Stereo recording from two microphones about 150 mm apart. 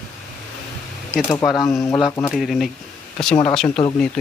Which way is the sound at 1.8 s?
25° left (ahead or behind).